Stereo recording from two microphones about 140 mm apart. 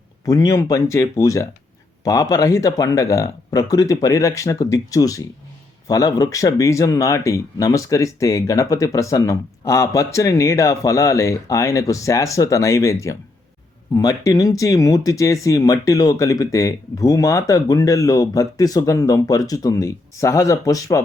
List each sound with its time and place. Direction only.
0.3 s speech: 25° left (ahead or behind)